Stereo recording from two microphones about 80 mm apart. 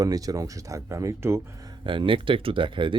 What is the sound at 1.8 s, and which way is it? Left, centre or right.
Speech, right.